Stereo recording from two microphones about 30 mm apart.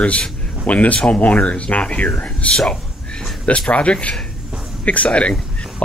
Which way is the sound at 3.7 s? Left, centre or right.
Left.